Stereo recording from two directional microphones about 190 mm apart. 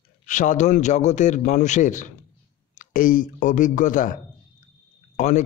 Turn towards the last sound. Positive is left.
turn(degrees=40)  # may be behind; listen again after turning